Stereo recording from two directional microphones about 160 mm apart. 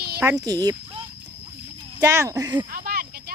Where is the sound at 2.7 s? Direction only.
65° right (ahead or behind).